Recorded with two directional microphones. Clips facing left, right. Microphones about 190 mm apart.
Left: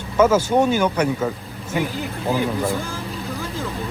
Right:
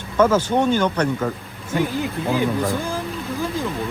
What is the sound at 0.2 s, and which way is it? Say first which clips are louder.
Speech: left 1 dB; 10° left (ahead or behind).